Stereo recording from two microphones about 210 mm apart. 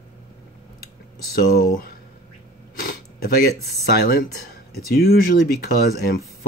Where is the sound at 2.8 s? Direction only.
50° left (ahead or behind).